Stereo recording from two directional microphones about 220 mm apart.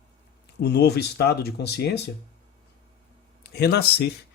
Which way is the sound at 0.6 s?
50° left (ahead or behind).